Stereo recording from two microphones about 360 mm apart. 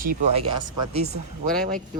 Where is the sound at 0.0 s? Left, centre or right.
Right.